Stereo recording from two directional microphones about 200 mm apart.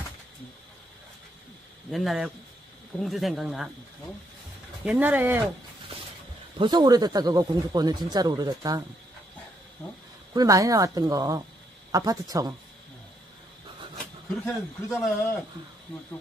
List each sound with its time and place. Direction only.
1.9 s speech: centre (ahead or behind)
4.8 s speech: 10° right (ahead or behind)
6.6 s speech: 20° right (ahead or behind)
10.3 s speech: 15° right (ahead or behind)
14.4 s a man's voice: 15° left (ahead or behind)